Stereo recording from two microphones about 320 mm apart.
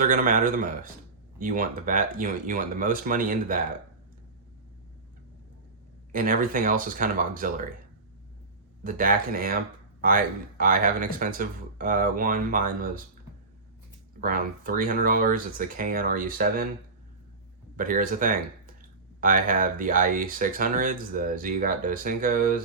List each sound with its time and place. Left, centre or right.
0.0 s speech: right
6.1 s speech: right
8.8 s speech: right
14.2 s speech: right
17.7 s speech: right